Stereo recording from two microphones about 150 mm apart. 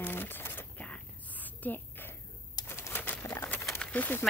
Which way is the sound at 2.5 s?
20° left (ahead or behind).